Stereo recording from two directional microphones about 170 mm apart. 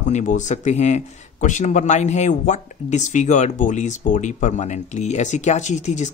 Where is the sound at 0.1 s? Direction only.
45° left (ahead or behind).